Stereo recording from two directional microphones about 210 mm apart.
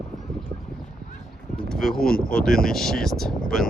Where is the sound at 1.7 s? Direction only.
Centre (ahead or behind).